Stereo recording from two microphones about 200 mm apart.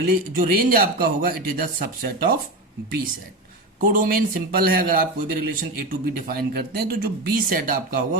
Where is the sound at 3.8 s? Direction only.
45° right (ahead or behind).